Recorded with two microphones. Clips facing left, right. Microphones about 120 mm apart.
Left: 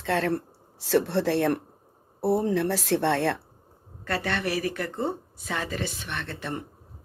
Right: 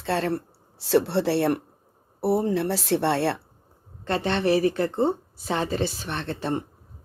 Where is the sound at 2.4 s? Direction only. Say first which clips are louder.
Right 1 dB; 10° right (ahead or behind).